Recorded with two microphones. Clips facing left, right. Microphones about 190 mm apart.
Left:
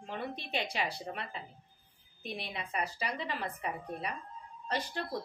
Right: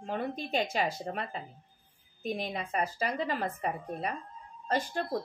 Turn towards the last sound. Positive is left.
turn(degrees=-45)  # may be behind; listen again after turning